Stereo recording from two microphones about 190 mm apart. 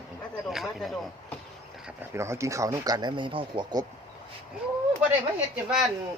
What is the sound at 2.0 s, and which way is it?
Speech, 15° right (ahead or behind).